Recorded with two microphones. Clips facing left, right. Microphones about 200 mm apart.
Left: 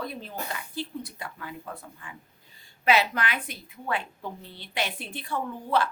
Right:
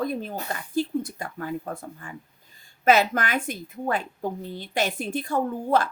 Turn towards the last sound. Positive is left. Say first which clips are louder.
# right 4 dB
turn(degrees=-45)  # may be behind; listen again after turning